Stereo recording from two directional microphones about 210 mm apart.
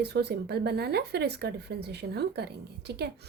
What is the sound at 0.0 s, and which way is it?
Speech, 50° right (ahead or behind).